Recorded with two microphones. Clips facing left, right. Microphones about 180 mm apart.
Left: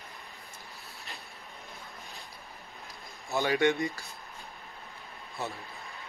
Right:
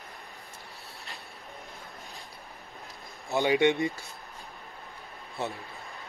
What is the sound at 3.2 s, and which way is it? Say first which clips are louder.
Speech: right 3 dB; 20° right (ahead or behind).